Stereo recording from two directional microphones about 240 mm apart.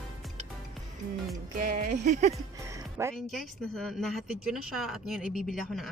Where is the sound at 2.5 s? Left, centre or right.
Centre.